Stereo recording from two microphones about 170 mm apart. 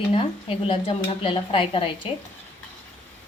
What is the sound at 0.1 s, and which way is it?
A woman's voice, 35° left (ahead or behind).